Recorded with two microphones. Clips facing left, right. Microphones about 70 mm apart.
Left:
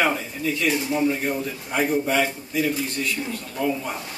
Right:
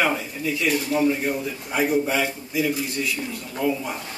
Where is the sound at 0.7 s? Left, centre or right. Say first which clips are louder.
Right 1 dB; centre.